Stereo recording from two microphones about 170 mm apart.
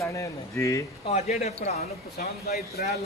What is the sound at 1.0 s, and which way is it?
Speech, 40° left (ahead or behind).